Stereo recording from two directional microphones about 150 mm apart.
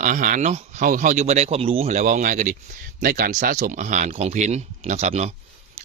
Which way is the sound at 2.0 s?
60° right (ahead or behind).